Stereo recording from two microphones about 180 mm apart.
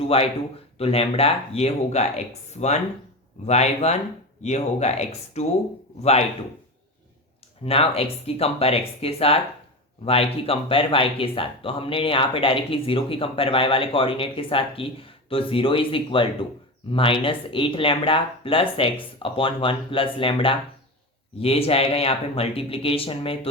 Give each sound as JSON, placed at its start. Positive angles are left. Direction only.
{"t": 0.0, "sound": "speech", "side_deg": 35}
{"t": 7.6, "sound": "speech", "side_deg": 35}